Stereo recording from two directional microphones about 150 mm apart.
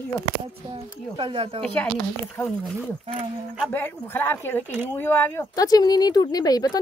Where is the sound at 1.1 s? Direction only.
35° right (ahead or behind).